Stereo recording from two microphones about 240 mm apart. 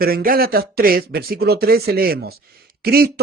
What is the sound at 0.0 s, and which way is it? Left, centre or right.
A man's voice, right.